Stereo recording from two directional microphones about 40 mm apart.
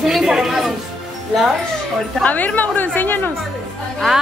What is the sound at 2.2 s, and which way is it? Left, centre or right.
A woman's voice, left.